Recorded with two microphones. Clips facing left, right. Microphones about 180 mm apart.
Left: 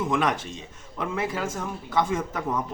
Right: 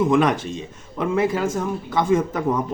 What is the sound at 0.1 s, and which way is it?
Speech, 20° right (ahead or behind).